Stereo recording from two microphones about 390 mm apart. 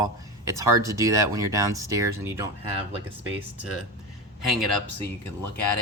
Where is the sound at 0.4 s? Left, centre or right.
Centre.